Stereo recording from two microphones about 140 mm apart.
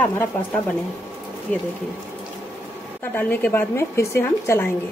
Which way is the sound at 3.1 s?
15° left (ahead or behind).